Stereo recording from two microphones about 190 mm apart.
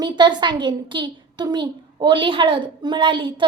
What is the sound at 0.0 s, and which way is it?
A child's voice, 20° right (ahead or behind).